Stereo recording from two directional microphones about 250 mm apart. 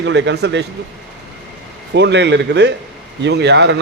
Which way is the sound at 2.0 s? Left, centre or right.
Right.